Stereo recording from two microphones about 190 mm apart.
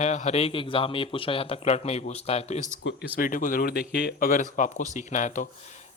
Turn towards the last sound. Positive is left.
turn(degrees=40)  # may be behind; listen again after turning